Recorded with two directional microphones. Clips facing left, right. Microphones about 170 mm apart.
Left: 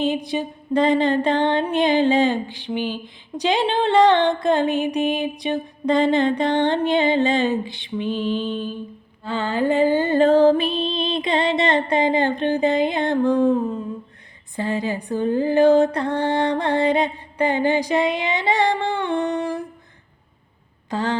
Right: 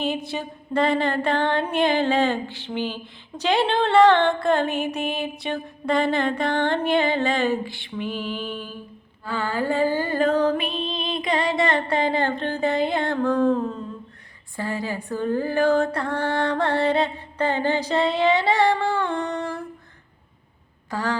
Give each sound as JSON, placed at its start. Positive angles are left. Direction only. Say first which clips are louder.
{"t": 0.0, "sound": "music", "louder": "left 4 dB", "side_deg": 15}
{"t": 20.9, "sound": "music", "louder": "left 3 dB", "side_deg": 20}